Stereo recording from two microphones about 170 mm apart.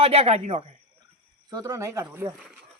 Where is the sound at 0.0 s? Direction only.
35° right (ahead or behind).